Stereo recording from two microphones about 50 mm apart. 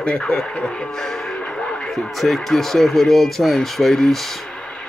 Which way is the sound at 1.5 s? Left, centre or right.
Centre.